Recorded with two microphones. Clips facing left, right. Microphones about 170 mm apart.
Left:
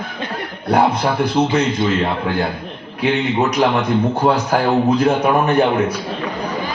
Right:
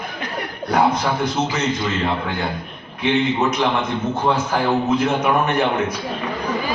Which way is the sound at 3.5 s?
35° left (ahead or behind).